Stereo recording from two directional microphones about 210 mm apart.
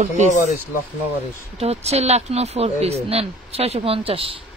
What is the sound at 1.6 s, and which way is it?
Speech, 30° right (ahead or behind).